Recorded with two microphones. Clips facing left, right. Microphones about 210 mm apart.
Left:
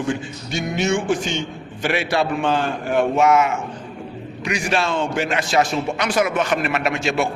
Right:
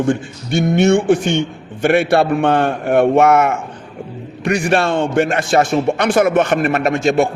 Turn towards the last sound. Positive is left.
turn(degrees=-45)  # may be behind; listen again after turning